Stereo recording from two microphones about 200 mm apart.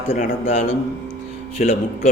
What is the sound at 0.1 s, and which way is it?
A man's voice, 35° left (ahead or behind).